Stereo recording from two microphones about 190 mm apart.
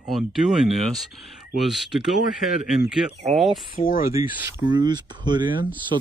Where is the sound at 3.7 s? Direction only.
45° left (ahead or behind).